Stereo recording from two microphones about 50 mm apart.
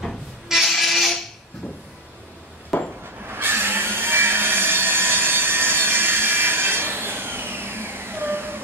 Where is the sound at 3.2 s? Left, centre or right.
Right.